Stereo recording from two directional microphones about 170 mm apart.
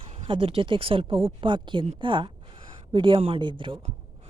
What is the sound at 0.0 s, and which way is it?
Speech, 35° right (ahead or behind).